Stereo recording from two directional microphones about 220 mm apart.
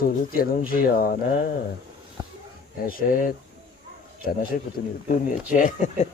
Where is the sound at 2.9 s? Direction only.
40° left (ahead or behind).